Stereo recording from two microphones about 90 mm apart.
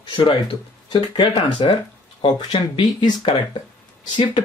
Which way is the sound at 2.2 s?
90° left.